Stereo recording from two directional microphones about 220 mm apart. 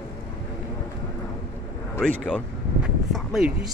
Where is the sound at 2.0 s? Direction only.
5° left (ahead or behind).